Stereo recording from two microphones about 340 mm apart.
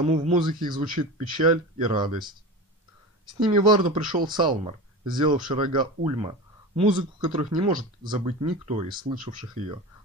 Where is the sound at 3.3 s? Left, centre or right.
Centre.